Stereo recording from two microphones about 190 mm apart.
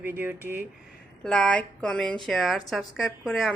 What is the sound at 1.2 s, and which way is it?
A woman's voice, 5° left (ahead or behind).